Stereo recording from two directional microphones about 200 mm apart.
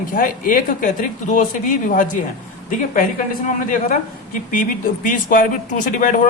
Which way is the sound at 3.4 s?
40° left (ahead or behind).